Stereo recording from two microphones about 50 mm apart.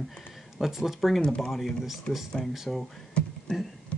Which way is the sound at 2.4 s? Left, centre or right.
Centre.